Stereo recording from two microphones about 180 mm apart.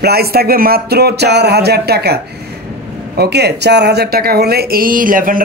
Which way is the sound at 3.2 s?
65° right (ahead or behind).